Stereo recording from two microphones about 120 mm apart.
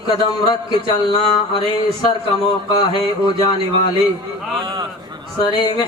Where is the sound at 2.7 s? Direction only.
40° left (ahead or behind).